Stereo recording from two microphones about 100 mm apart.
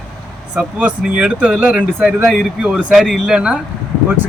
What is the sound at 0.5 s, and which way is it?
Speech, 10° right (ahead or behind).